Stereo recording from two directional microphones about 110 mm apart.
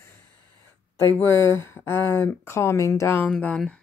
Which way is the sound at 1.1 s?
20° left (ahead or behind).